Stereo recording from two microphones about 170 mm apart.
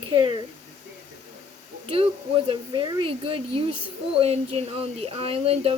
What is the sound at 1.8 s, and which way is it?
Speech, 35° right (ahead or behind).